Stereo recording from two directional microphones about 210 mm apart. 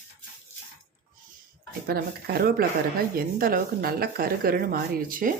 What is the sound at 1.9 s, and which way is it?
Speech, 50° right (ahead or behind).